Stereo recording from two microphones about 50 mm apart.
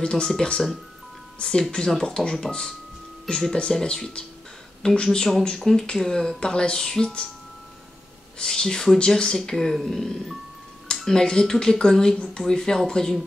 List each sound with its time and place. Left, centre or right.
0.0 s speech: centre
8.4 s speech: centre